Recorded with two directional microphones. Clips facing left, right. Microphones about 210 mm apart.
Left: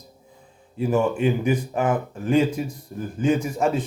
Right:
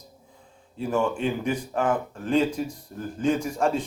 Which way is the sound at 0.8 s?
5° left (ahead or behind).